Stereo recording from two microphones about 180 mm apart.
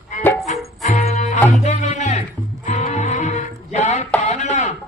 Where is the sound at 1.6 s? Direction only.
40° left (ahead or behind).